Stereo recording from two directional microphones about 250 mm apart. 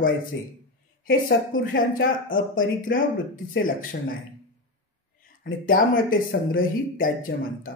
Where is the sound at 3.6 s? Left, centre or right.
Left.